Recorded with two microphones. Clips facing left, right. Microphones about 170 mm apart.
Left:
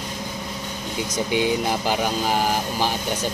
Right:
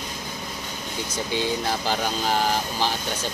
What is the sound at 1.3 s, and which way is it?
Speech, 15° left (ahead or behind).